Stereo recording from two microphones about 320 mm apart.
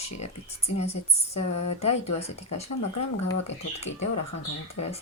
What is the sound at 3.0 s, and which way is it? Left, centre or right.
Speech, left.